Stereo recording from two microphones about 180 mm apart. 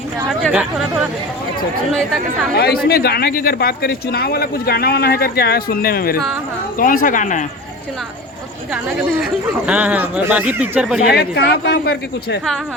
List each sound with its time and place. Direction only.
0.3 s speech: 5° right (ahead or behind)
1.9 s speech: centre (ahead or behind)
2.6 s speech: 60° left (ahead or behind)
8.7 s speech: 10° right (ahead or behind)
11.1 s speech: 65° left (ahead or behind)